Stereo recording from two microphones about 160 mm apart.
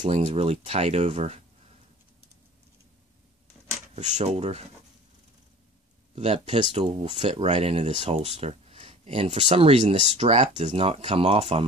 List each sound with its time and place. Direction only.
0.0 s speech: 45° right (ahead or behind)
3.9 s speech: 45° right (ahead or behind)
6.1 s speech: 40° right (ahead or behind)